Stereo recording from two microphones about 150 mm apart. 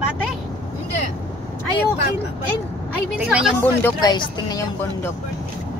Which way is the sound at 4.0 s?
25° left (ahead or behind).